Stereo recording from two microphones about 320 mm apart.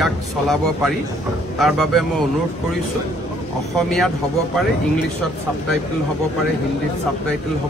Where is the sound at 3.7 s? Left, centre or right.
Centre.